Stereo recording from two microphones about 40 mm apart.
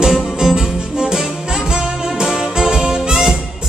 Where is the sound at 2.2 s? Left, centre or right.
Centre.